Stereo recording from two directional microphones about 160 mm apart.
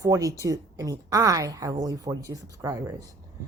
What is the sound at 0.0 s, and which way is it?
A woman's voice, 20° right (ahead or behind).